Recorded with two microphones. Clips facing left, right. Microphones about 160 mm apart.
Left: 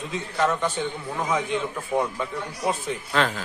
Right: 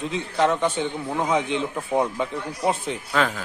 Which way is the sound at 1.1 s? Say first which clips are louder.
Right 3 dB; 20° right (ahead or behind).